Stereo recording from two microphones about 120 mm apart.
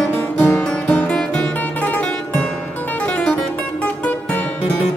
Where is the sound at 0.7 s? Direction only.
5° left (ahead or behind).